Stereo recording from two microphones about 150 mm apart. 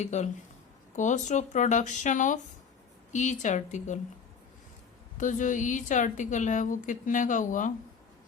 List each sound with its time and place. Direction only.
0.0 s a woman's voice: 50° left (ahead or behind)
5.1 s a woman's voice: 55° left (ahead or behind)